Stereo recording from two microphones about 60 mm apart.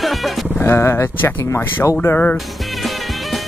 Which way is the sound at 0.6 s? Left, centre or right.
Left.